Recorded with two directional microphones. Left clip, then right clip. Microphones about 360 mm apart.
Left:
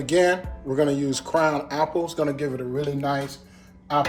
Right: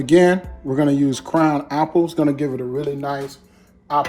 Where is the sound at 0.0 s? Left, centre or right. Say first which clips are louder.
Right 6 dB; centre.